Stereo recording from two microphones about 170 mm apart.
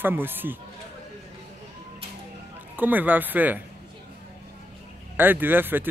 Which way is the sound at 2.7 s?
10° right (ahead or behind).